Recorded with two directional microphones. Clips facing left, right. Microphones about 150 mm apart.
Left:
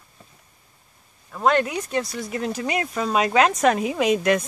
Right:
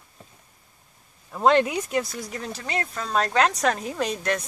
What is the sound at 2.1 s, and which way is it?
Speech, 5° left (ahead or behind).